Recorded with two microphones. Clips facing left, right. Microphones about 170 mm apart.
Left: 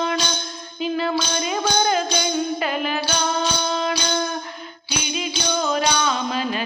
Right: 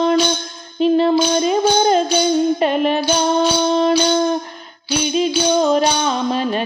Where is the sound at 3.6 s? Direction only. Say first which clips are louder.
Right 8 dB; 35° right (ahead or behind).